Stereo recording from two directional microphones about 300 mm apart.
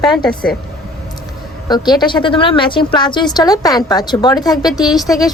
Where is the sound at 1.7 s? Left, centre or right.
Centre.